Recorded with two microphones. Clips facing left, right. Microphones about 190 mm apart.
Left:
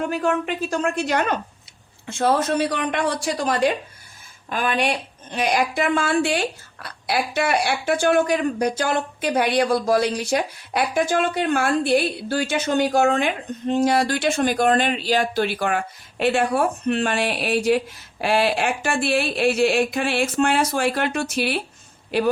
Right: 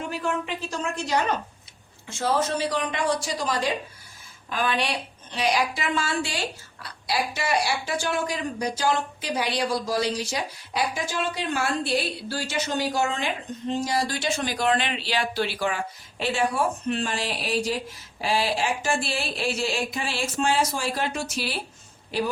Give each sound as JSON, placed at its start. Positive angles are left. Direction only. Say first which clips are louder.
{"t": 0.1, "sound": "speech", "louder": "left 6 dB", "side_deg": 60}